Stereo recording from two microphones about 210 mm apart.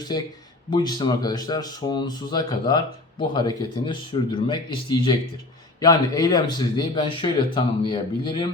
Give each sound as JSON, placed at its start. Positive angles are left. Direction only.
{"t": 0.7, "sound": "speech", "side_deg": 20}